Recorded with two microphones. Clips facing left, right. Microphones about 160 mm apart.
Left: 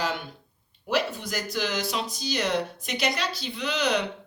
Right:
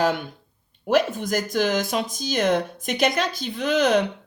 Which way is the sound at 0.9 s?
50° right (ahead or behind).